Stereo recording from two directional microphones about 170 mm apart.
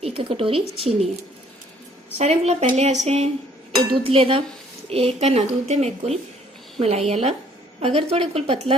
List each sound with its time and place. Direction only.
0.0 s speech: 35° right (ahead or behind)
2.1 s speech: 40° right (ahead or behind)